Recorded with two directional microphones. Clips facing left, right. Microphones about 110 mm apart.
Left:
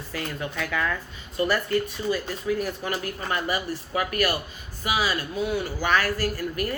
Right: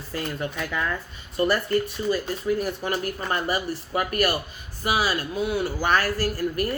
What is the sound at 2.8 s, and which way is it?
Speech, 35° right (ahead or behind).